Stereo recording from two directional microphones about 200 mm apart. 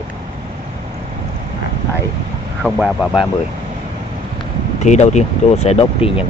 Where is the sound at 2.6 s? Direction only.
5° right (ahead or behind).